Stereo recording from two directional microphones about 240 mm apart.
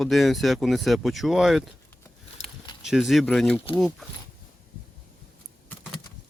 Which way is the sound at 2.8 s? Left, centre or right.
Centre.